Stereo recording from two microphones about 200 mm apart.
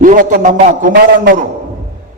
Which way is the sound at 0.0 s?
40° right (ahead or behind).